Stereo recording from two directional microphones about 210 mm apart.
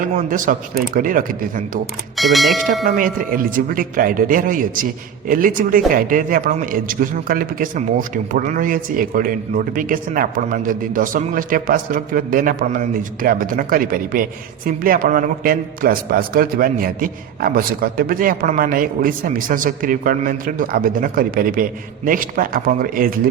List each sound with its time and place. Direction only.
0.0 s a man's voice: 40° right (ahead or behind)
2.1 s speech: centre (ahead or behind)
2.8 s a man's voice: 45° right (ahead or behind)